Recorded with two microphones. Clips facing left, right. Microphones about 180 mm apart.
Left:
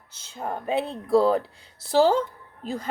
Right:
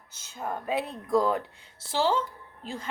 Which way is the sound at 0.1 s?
30° left (ahead or behind).